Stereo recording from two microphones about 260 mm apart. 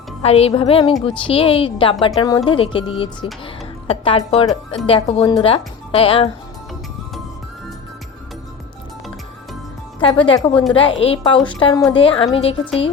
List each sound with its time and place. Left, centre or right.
0.2 s a woman's voice: left
10.0 s a woman's voice: centre